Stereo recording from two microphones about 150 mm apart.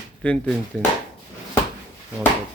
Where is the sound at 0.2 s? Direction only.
10° left (ahead or behind).